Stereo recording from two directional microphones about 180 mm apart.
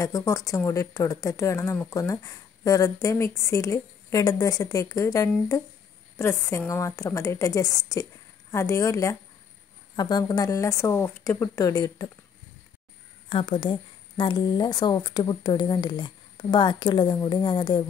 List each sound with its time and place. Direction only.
0.0 s a woman's voice: 20° left (ahead or behind)
13.3 s a woman's voice: 30° left (ahead or behind)